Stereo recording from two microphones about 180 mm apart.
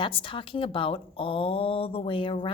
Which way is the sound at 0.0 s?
30° left (ahead or behind).